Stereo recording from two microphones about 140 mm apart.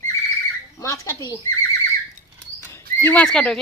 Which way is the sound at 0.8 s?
20° left (ahead or behind).